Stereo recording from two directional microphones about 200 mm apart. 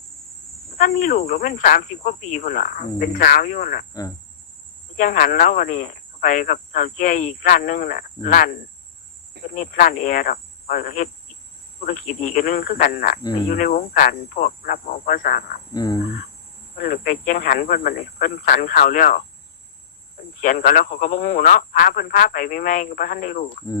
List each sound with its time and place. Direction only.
0.8 s speech: 40° left (ahead or behind)
4.9 s speech: 45° left (ahead or behind)
9.6 s speech: 40° left (ahead or behind)
15.7 s speech: 20° left (ahead or behind)
16.7 s speech: 45° left (ahead or behind)
20.4 s speech: 40° left (ahead or behind)